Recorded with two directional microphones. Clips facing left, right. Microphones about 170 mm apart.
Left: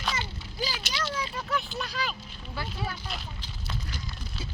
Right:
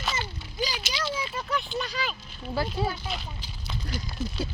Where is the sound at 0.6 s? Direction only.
15° right (ahead or behind).